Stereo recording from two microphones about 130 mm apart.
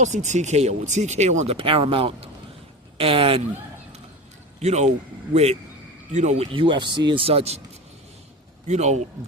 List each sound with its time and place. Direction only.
0.0 s speech: 65° right (ahead or behind)
1.5 s speech: 45° right (ahead or behind)
4.6 s speech: 60° right (ahead or behind)
8.6 s speech: 60° right (ahead or behind)